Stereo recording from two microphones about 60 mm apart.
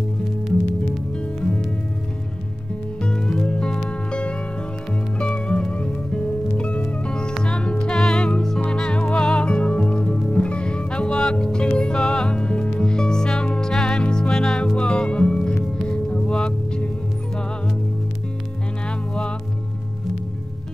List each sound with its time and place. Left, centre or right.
1.1 s music: centre
3.0 s music: centre
14.3 s music: centre
18.9 s music: centre